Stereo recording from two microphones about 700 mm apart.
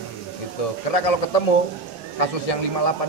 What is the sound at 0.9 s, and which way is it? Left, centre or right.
Speech, left.